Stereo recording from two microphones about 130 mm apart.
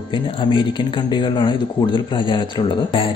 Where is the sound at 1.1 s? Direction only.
35° left (ahead or behind).